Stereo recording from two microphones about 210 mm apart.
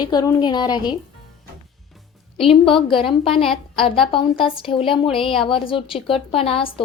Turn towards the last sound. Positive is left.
turn(degrees=25)  # may be behind; listen again after turning